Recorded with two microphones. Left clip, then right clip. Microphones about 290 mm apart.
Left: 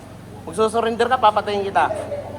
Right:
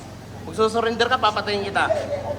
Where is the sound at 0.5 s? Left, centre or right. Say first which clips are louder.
Left 1 dB; left.